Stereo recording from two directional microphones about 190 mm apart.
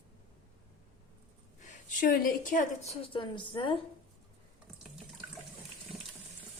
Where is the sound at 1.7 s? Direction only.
45° left (ahead or behind).